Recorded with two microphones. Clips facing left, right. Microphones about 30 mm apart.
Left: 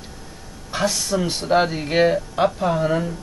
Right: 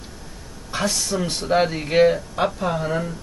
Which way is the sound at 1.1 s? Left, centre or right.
Centre.